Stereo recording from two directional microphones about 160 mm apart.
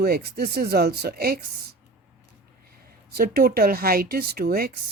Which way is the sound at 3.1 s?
70° right (ahead or behind).